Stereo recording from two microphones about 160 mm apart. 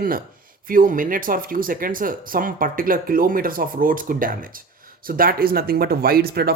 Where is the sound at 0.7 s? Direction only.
60° right (ahead or behind).